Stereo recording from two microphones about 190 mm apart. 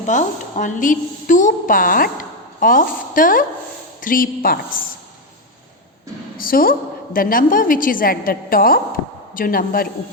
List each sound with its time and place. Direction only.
0.0 s a woman's voice: 40° left (ahead or behind)
6.3 s a woman's voice: 50° left (ahead or behind)